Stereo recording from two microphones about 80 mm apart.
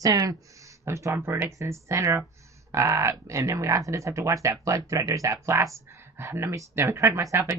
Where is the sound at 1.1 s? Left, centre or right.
Right.